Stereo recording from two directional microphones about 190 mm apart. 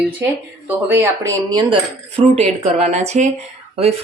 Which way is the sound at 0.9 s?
15° right (ahead or behind).